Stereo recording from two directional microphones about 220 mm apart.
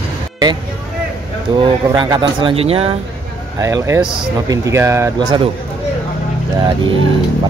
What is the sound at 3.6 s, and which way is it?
Speech, 15° right (ahead or behind).